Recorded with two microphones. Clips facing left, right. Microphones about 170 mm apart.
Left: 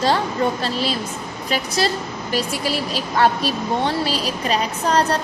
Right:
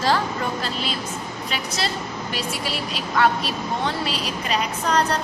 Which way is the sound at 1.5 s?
40° left (ahead or behind).